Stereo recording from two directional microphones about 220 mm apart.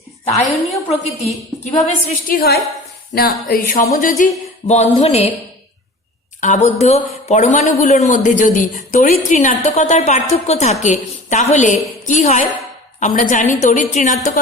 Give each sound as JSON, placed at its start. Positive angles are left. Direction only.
{"t": 0.9, "sound": "a woman's voice", "side_deg": 30}
{"t": 6.4, "sound": "a woman's voice", "side_deg": 30}